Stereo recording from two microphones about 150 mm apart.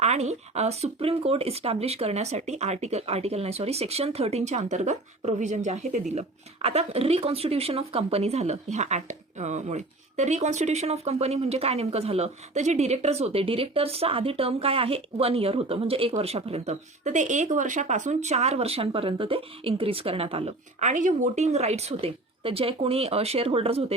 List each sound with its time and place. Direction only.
0.0 s a woman's voice: 50° right (ahead or behind)